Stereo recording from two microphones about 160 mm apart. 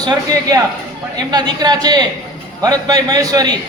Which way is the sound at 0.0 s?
25° right (ahead or behind).